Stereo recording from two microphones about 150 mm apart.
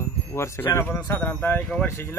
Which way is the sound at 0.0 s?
20° left (ahead or behind).